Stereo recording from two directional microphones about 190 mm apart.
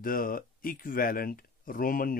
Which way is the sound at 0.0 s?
50° left (ahead or behind).